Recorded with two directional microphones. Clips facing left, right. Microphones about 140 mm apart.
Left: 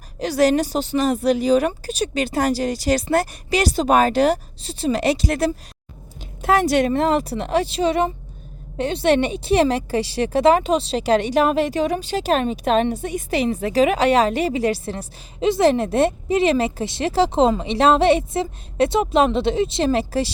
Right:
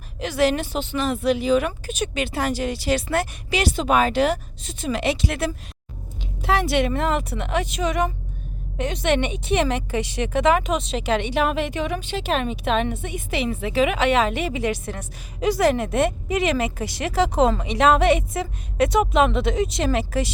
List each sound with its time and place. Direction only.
0.2 s speech: 40° left (ahead or behind)